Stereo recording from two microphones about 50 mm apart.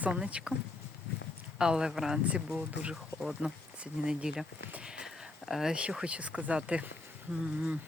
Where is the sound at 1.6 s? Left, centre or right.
Centre.